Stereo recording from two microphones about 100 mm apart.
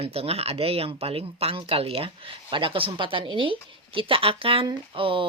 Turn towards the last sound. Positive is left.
turn(degrees=-60)  # may be behind; listen again after turning